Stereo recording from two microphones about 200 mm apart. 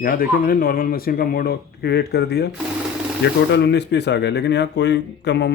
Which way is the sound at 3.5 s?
60° left (ahead or behind).